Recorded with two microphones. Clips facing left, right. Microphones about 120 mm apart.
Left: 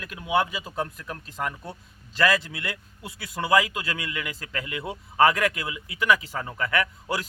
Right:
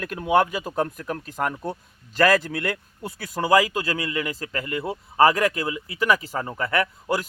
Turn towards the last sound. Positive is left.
turn(degrees=-40)  # may be behind; listen again after turning